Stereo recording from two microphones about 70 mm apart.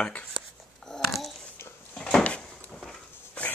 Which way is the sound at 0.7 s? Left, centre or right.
Centre.